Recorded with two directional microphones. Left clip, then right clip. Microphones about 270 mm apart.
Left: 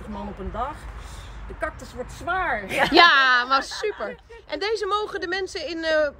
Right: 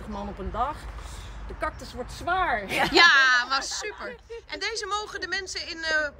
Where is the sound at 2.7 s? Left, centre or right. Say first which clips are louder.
Left 3 dB; centre.